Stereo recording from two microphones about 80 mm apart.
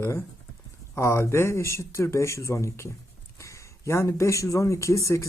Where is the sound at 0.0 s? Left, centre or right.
Left.